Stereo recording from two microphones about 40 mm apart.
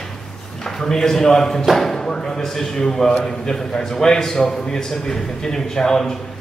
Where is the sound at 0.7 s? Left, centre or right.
Centre.